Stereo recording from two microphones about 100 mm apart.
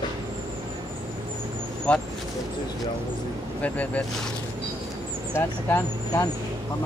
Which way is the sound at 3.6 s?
15° left (ahead or behind).